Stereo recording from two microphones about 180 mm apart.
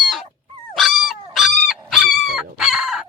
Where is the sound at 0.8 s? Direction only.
Centre (ahead or behind).